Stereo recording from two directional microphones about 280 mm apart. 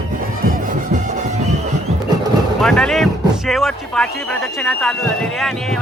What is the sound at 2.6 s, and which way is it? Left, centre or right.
Speech, centre.